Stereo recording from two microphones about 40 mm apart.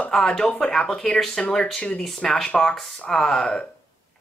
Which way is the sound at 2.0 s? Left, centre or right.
Centre.